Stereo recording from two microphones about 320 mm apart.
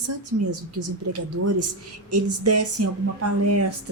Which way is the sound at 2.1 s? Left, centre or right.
Right.